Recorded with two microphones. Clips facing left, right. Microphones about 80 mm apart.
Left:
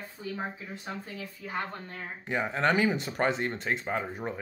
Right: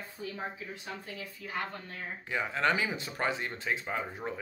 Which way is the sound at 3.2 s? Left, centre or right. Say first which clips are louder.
Left 4 dB; left.